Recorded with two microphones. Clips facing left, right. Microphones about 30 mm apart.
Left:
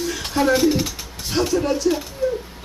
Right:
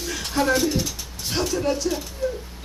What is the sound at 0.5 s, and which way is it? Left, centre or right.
Speech, centre.